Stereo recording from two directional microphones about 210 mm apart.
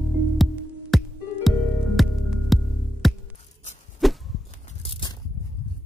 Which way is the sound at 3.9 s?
Centre (ahead or behind).